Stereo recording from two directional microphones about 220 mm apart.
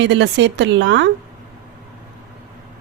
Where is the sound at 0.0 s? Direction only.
55° right (ahead or behind).